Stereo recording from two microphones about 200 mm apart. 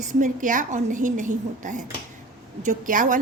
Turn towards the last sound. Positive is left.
turn(degrees=-40)  # may be behind; listen again after turning